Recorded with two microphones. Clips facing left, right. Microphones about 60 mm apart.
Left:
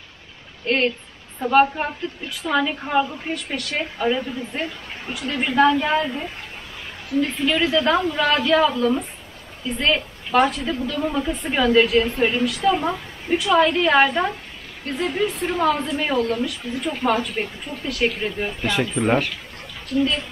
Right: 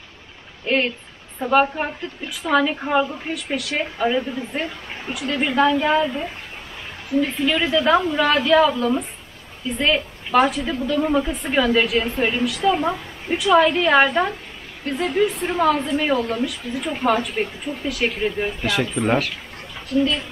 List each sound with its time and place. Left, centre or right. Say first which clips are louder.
0.7 s a woman's voice: even; centre